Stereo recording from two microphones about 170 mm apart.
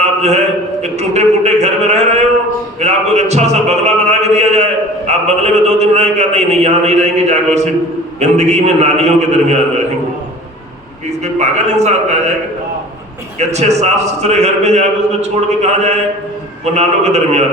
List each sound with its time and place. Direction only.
0.0 s a sound: 40° right (ahead or behind)
8.2 s a man's voice: 40° right (ahead or behind)
11.2 s a man's voice: 40° right (ahead or behind)
13.5 s a man's voice: 40° right (ahead or behind)